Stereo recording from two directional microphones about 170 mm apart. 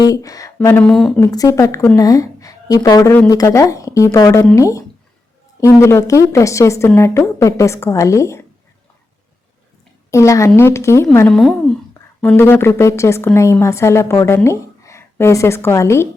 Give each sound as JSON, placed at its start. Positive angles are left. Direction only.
{"t": 0.0, "sound": "speech", "side_deg": 20}
{"t": 1.2, "sound": "a woman's voice", "side_deg": 20}
{"t": 10.1, "sound": "a woman's voice", "side_deg": 20}